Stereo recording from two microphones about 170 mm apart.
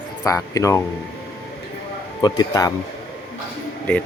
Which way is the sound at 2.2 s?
25° left (ahead or behind).